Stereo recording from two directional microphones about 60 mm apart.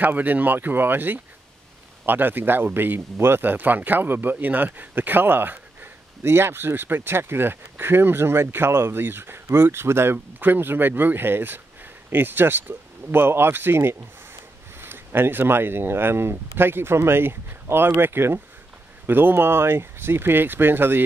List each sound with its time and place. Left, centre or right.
0.0 s speech: right